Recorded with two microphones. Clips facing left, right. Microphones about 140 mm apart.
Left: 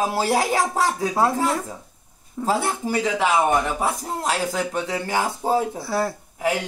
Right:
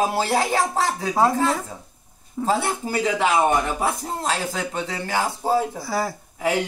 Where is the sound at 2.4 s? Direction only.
5° right (ahead or behind).